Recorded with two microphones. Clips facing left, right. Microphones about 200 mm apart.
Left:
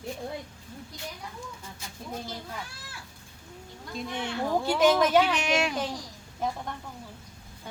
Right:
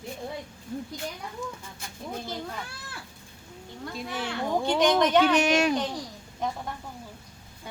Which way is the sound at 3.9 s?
5° right (ahead or behind).